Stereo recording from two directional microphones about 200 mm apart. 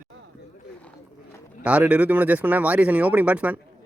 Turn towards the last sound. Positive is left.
turn(degrees=-5)  # may be behind; listen again after turning